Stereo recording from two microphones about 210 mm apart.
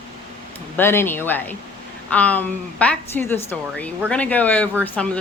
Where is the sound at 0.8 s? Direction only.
10° left (ahead or behind).